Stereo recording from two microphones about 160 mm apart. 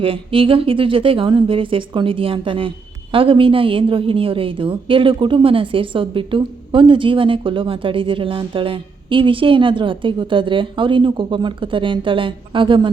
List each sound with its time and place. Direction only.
0.0 s speech: 35° right (ahead or behind)